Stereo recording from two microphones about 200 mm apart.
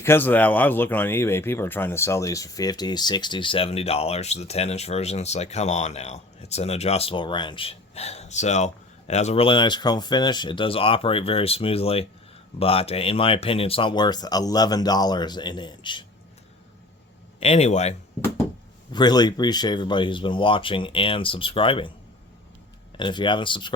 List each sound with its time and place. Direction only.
0.0 s speech: 10° left (ahead or behind)
17.4 s speech: 30° left (ahead or behind)
18.9 s speech: 20° left (ahead or behind)
23.0 s speech: 25° left (ahead or behind)